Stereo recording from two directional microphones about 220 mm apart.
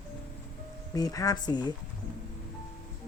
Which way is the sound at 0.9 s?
15° left (ahead or behind).